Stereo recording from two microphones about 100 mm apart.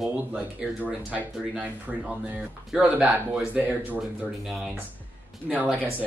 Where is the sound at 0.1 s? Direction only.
15° right (ahead or behind).